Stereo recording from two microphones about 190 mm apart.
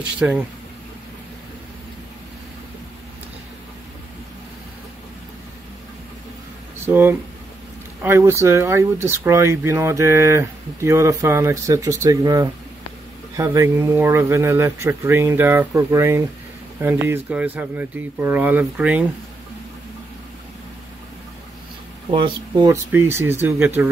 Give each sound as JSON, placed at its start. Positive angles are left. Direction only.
{"t": 0.2, "sound": "speech", "side_deg": -5}
{"t": 6.9, "sound": "speech", "side_deg": -10}
{"t": 22.1, "sound": "speech", "side_deg": -25}
{"t": 22.8, "sound": "speech", "side_deg": -10}